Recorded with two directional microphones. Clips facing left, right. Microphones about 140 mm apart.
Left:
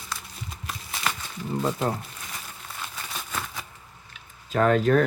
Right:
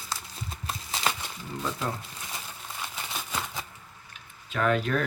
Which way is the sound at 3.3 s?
20° right (ahead or behind).